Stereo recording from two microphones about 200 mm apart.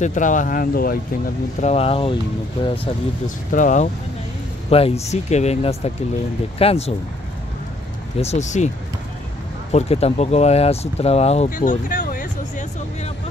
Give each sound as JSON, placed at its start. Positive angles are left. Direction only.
{"t": 0.0, "sound": "speech", "side_deg": 40}
{"t": 1.6, "sound": "speech", "side_deg": 30}
{"t": 3.5, "sound": "speech", "side_deg": 40}
{"t": 8.2, "sound": "speech", "side_deg": 35}
{"t": 9.7, "sound": "speech", "side_deg": 35}
{"t": 11.9, "sound": "music", "side_deg": 40}